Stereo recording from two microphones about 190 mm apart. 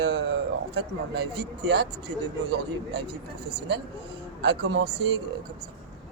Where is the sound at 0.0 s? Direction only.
65° right (ahead or behind).